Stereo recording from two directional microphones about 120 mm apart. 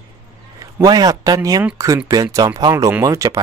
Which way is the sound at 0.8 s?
30° right (ahead or behind).